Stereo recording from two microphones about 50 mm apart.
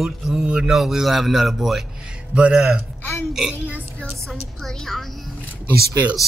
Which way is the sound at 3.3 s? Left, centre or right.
Centre.